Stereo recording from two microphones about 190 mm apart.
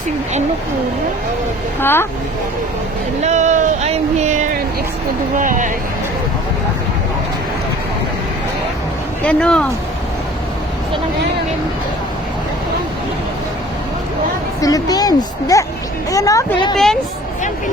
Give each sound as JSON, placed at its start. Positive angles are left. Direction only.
{"t": 1.8, "sound": "speech", "side_deg": 10}
{"t": 3.2, "sound": "speech", "side_deg": -40}
{"t": 9.2, "sound": "speech", "side_deg": 5}
{"t": 14.6, "sound": "speech", "side_deg": 20}
{"t": 16.7, "sound": "speech", "side_deg": 0}